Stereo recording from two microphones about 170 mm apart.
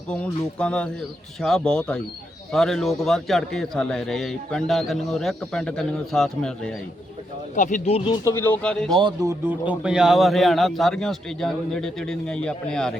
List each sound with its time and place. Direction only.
0.1 s a man's voice: 5° left (ahead or behind)
7.5 s speech: 45° left (ahead or behind)
8.2 s speech: 15° left (ahead or behind)
9.0 s speech: 25° right (ahead or behind)
9.5 s a man's voice: 5° right (ahead or behind)